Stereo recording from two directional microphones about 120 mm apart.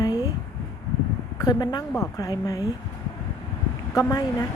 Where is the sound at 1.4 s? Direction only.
35° left (ahead or behind).